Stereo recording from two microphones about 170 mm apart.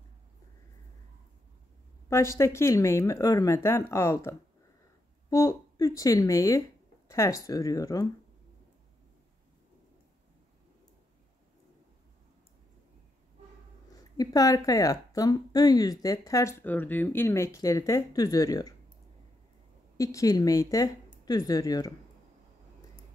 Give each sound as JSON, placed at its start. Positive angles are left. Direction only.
{"t": 2.0, "sound": "speech", "side_deg": 15}
{"t": 14.1, "sound": "speech", "side_deg": 20}
{"t": 20.0, "sound": "speech", "side_deg": 20}